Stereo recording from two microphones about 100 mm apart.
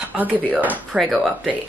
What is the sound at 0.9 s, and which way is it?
Speech, centre (ahead or behind).